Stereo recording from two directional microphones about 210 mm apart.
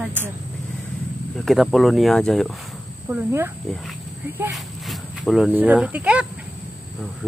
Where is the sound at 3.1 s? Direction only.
10° right (ahead or behind).